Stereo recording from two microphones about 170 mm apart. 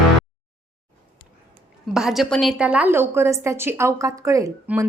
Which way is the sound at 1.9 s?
Centre (ahead or behind).